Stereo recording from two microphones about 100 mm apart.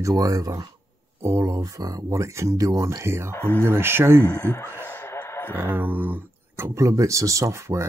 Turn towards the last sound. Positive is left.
turn(degrees=-30)  # may be behind; listen again after turning